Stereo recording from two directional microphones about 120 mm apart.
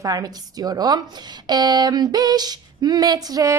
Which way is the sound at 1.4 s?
35° right (ahead or behind).